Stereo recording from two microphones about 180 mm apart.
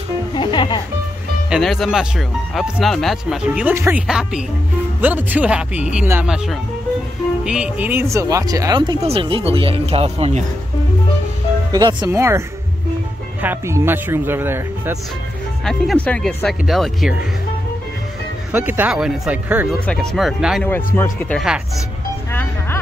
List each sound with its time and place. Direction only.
0.3 s music: 25° left (ahead or behind)
1.5 s speech: centre (ahead or behind); by 10.4 s 35° right (ahead or behind)
11.7 s speech: 20° right (ahead or behind)
15.6 s speech: 5° left (ahead or behind)
18.5 s speech: 10° right (ahead or behind)
19.9 s speech: 5° left (ahead or behind)
20.6 s speech: 10° left (ahead or behind)
22.3 s music: 10° left (ahead or behind)